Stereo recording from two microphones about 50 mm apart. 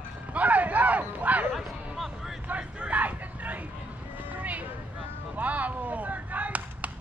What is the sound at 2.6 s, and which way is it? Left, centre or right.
Vehicle, right.